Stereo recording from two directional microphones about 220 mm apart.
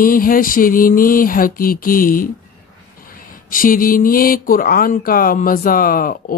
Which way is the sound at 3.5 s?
40° left (ahead or behind).